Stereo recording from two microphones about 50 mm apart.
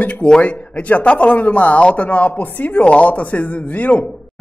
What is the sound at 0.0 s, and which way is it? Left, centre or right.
Speech, left.